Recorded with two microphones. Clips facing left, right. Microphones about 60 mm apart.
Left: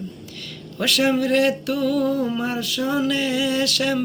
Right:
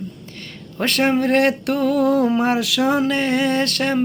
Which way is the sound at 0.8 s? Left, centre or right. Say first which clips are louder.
Right 2 dB; right.